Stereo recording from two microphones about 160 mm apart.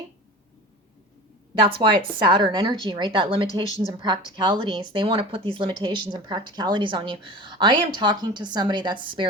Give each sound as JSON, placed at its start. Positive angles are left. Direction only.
{"t": 1.6, "sound": "a woman's voice", "side_deg": -30}